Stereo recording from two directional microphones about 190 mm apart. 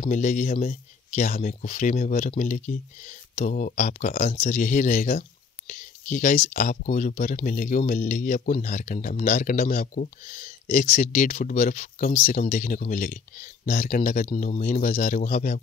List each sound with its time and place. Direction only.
0.1 s speech: 40° left (ahead or behind)